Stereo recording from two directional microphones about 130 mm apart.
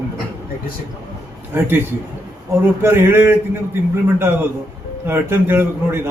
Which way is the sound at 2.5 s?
20° right (ahead or behind).